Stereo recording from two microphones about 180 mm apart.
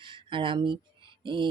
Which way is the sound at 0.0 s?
25° right (ahead or behind).